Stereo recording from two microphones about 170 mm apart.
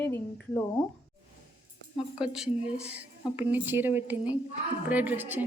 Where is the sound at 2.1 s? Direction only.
5° right (ahead or behind).